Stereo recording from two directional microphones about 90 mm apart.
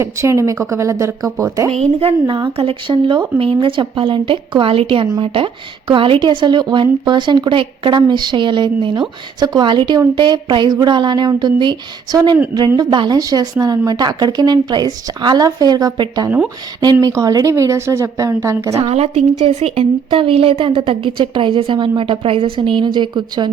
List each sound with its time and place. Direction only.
0.0 s a woman's voice: 35° right (ahead or behind)
2.2 s speech: 55° right (ahead or behind)
2.5 s a woman's voice: 85° right; by 3.2 s 70° right (ahead or behind)
3.3 s a woman's voice: 80° right; by 13.1 s 55° right (ahead or behind)
13.1 s a woman's voice: 45° right (ahead or behind)
19.6 s a woman's voice: 80° right; by 23.5 s 55° right (ahead or behind)